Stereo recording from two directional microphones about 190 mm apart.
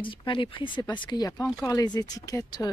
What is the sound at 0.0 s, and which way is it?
Speech, 25° left (ahead or behind).